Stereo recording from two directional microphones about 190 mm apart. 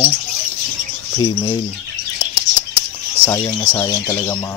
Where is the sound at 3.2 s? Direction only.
20° left (ahead or behind).